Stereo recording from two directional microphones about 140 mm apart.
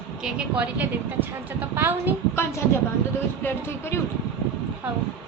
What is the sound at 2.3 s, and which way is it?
A woman's voice, 20° left (ahead or behind).